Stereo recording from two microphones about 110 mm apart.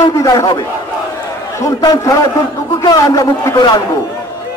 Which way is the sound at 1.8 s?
30° left (ahead or behind).